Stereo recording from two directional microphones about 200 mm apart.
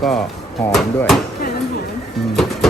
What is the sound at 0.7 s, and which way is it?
Speech, centre (ahead or behind).